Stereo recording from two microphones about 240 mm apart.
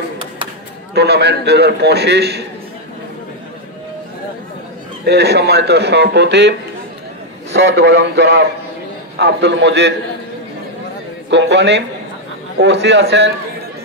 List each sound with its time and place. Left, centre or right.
0.9 s a man's voice: right
5.0 s a man's voice: right
7.5 s a man's voice: right
11.2 s a man's voice: right